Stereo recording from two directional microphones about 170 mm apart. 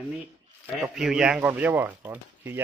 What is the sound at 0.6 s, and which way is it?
Speech, centre (ahead or behind).